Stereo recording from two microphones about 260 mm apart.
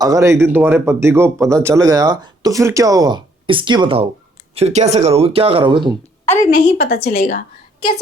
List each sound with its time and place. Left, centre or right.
0.0 s speech: centre
6.2 s a woman's voice: left